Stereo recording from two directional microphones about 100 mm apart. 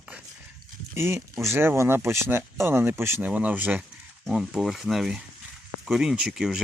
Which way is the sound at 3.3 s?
15° right (ahead or behind).